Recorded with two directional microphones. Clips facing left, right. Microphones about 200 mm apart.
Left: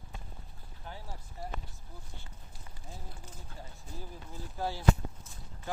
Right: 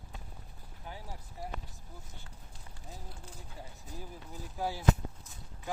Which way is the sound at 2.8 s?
5° left (ahead or behind).